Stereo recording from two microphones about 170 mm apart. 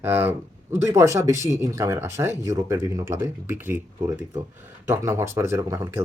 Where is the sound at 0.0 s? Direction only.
10° right (ahead or behind).